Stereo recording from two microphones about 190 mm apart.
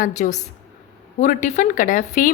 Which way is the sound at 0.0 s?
40° left (ahead or behind).